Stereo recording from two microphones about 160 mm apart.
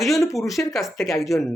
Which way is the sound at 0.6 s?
10° left (ahead or behind).